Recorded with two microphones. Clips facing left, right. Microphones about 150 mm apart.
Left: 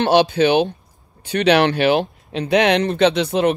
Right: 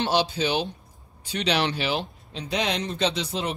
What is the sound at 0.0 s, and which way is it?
Speech, 60° left (ahead or behind).